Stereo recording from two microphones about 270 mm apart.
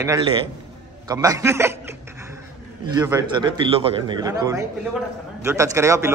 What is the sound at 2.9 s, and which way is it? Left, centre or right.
A man's voice, centre.